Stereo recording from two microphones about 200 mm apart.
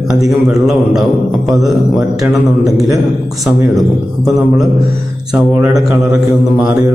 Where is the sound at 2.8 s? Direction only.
15° right (ahead or behind).